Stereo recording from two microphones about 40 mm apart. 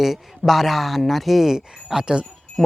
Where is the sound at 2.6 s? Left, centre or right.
Centre.